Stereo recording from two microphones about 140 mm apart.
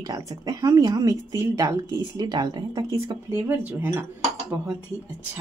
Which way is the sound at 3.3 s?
15° right (ahead or behind).